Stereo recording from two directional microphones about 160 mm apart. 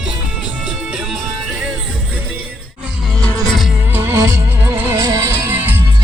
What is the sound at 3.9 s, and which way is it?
Music, 15° right (ahead or behind).